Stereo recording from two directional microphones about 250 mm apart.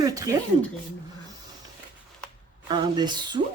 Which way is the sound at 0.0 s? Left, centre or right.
Centre.